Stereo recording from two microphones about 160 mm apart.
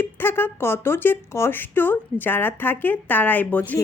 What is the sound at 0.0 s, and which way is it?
A woman's voice, 15° left (ahead or behind).